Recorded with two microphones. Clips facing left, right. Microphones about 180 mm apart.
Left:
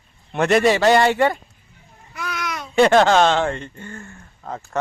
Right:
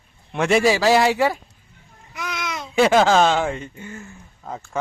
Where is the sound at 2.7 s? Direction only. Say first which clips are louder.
Left 2 dB; 5° right (ahead or behind).